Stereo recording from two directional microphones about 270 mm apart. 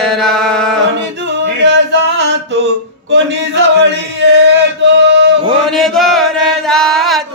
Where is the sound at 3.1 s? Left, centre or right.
Right.